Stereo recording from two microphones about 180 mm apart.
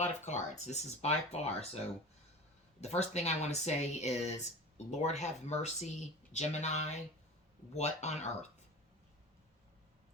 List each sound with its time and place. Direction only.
0.0 s speech: 40° left (ahead or behind)
2.8 s speech: 35° left (ahead or behind)